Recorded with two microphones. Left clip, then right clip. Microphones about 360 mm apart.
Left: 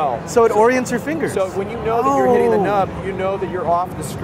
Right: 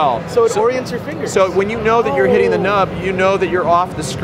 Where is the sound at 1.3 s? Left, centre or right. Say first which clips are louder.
Right 7 dB; right.